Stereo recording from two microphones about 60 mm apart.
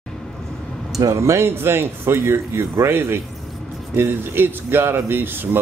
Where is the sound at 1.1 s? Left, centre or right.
Right.